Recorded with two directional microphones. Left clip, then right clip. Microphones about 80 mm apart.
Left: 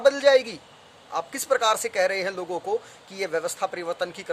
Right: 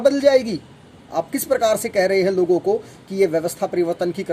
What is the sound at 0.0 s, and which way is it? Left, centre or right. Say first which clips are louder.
Speech: right 3 dB; left.